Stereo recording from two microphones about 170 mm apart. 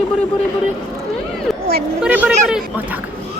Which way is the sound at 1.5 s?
Centre (ahead or behind).